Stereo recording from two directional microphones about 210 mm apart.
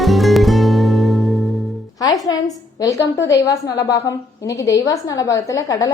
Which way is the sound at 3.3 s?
15° left (ahead or behind).